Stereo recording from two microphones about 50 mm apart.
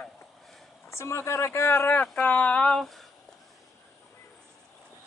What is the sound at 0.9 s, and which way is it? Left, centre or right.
Speech, left.